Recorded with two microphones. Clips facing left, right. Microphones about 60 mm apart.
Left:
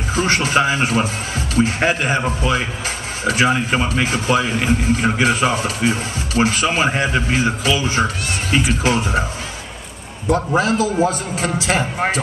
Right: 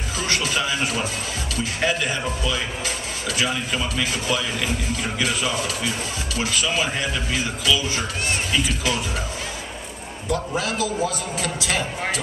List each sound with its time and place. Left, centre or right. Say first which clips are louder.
0.1 s a sound: left 8 dB; left
1.5 s a man's voice: left 7 dB; left
10.3 s a man's voice: left 8 dB; left